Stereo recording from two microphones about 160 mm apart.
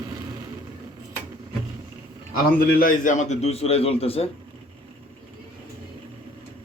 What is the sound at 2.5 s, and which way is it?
A man's voice, 65° left (ahead or behind).